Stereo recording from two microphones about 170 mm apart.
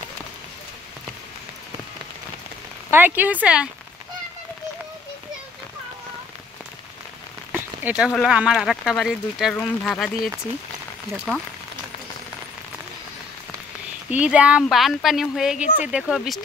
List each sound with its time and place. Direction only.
2.9 s speech: 10° right (ahead or behind)
7.5 s rain on surface: 10° right (ahead or behind)
8.1 s speech: 5° left (ahead or behind)
14.1 s speech: 5° right (ahead or behind)
15.6 s speech: 45° left (ahead or behind)
15.9 s speech: centre (ahead or behind)